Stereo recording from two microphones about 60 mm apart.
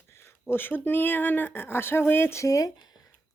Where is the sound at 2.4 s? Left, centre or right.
Left.